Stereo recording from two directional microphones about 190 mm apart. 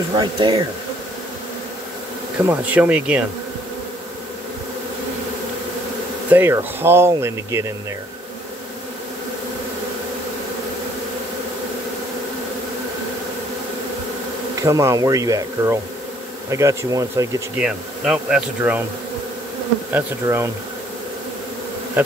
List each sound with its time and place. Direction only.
0.2 s speech: 25° right (ahead or behind)
2.4 s speech: 10° right (ahead or behind)
6.3 s speech: 10° right (ahead or behind)
14.5 s speech: 15° right (ahead or behind)
17.6 s speech: 5° right (ahead or behind)
19.9 s speech: 15° right (ahead or behind)